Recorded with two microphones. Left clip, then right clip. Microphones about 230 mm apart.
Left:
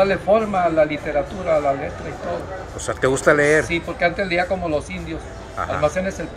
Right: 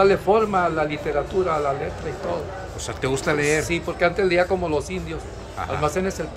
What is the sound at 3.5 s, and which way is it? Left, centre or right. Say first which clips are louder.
Speech: left 4 dB; centre.